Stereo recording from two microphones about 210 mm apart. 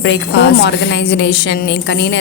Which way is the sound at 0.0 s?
55° left (ahead or behind).